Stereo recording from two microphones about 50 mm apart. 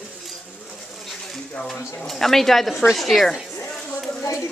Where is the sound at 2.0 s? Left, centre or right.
Centre.